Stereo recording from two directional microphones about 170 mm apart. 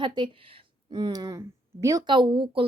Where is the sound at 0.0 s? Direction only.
30° right (ahead or behind).